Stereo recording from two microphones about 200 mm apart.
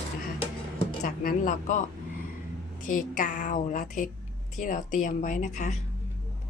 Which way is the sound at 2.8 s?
40° left (ahead or behind).